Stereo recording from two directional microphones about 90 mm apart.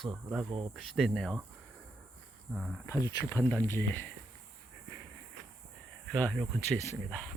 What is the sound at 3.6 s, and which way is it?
Speech, 25° left (ahead or behind).